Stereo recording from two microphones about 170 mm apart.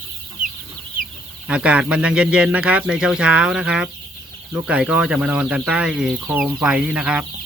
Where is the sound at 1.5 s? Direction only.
5° right (ahead or behind).